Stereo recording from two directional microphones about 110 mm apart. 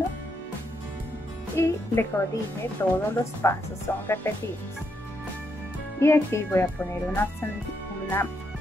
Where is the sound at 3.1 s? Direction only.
20° left (ahead or behind).